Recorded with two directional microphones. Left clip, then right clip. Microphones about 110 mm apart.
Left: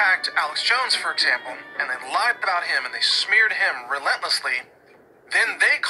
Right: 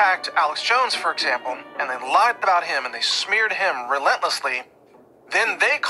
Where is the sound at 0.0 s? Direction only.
45° right (ahead or behind).